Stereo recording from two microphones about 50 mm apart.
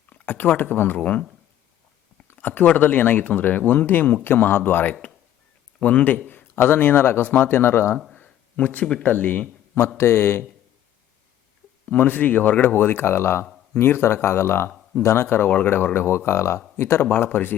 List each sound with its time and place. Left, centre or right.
0.1 s speech: left
0.9 s speech: left
2.3 s speech: left
5.8 s speech: left
8.1 s a sound: left
9.0 s speech: left
10.0 s speech: left
11.9 s speech: left
15.4 s speech: left
15.7 s speech: left